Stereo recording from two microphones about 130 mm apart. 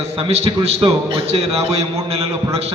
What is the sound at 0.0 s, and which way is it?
A man's voice, 55° right (ahead or behind).